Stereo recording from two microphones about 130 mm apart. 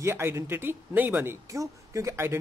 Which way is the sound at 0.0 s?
20° right (ahead or behind).